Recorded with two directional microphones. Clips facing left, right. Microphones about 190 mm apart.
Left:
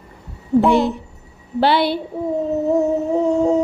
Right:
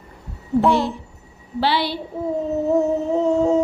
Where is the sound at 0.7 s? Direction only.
20° left (ahead or behind).